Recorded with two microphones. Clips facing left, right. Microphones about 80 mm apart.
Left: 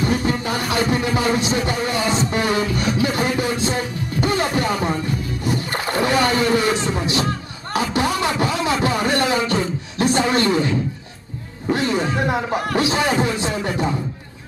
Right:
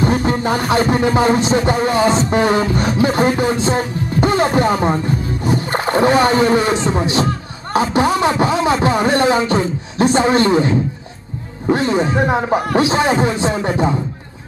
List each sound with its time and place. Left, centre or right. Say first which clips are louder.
0.0 s a man's voice: right 4 dB; right